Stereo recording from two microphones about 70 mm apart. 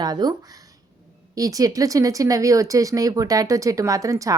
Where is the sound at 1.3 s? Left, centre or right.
Right.